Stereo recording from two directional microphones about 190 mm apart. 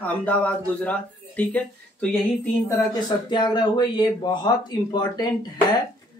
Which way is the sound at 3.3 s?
25° left (ahead or behind).